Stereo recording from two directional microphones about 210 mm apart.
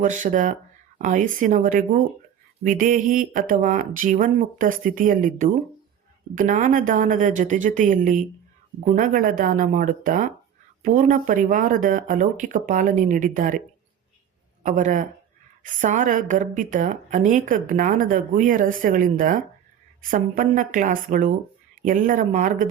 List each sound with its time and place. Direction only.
0.0 s a woman's voice: 40° right (ahead or behind)
14.6 s a woman's voice: 35° right (ahead or behind)